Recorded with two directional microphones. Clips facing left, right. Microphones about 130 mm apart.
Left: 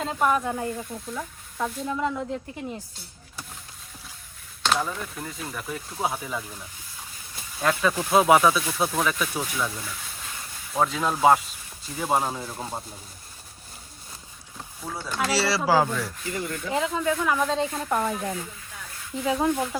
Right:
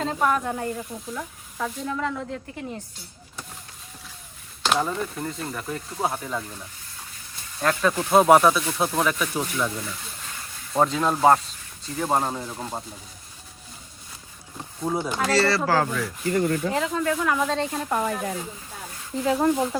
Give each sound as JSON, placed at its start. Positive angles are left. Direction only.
{"t": 0.0, "sound": "speech", "side_deg": 5}
{"t": 1.9, "sound": "speech", "side_deg": 15}
{"t": 4.6, "sound": "speech", "side_deg": 0}
{"t": 14.8, "sound": "speech", "side_deg": -20}
{"t": 15.2, "sound": "speech", "side_deg": 5}
{"t": 16.3, "sound": "rub", "side_deg": -50}
{"t": 16.7, "sound": "speech", "side_deg": 5}